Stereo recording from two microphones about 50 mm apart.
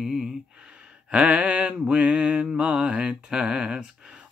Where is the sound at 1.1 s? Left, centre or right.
Right.